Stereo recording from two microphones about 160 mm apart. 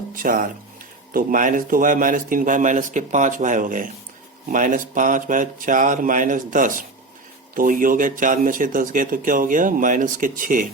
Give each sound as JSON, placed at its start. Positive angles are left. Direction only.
{"t": 0.1, "sound": "speech", "side_deg": -60}